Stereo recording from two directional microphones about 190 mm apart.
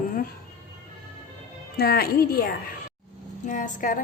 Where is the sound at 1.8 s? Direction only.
55° left (ahead or behind).